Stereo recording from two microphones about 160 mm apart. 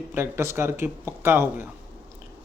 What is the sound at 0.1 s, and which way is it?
Speech, 15° right (ahead or behind).